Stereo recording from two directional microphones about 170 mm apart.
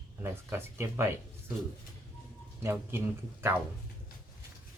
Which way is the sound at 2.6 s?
15° right (ahead or behind).